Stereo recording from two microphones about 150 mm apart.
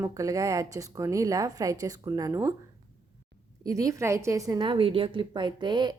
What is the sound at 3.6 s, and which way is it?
A woman's voice, 20° right (ahead or behind).